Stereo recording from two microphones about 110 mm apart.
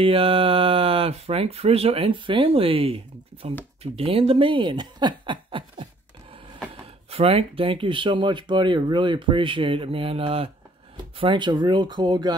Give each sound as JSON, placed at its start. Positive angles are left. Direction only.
{"t": 0.0, "sound": "speech", "side_deg": -55}
{"t": 7.1, "sound": "speech", "side_deg": -65}
{"t": 11.1, "sound": "speech", "side_deg": -45}